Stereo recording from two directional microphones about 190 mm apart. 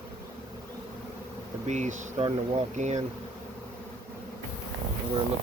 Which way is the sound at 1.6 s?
35° right (ahead or behind).